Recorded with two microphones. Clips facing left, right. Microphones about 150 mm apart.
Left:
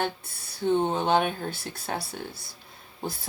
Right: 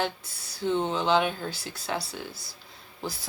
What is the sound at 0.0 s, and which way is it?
Speech, 55° left (ahead or behind).